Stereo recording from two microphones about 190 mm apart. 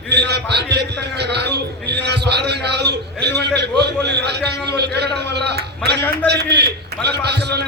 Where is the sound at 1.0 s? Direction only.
60° right (ahead or behind).